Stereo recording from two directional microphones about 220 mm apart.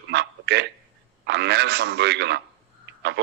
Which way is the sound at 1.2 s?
50° right (ahead or behind).